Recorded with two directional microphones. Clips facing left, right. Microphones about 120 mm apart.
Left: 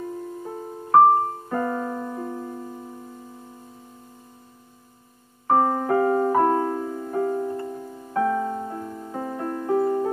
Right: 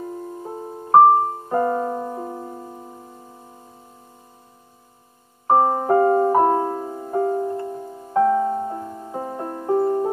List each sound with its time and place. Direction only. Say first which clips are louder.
0.0 s piano: right 1 dB; 25° right (ahead or behind)
5.5 s music: right 3 dB; 25° right (ahead or behind)